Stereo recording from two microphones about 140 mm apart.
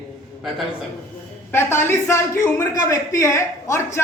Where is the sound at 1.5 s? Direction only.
15° left (ahead or behind).